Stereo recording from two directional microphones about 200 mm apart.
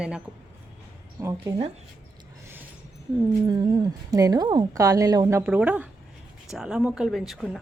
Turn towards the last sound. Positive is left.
turn(degrees=0)  # may be behind; listen again after turning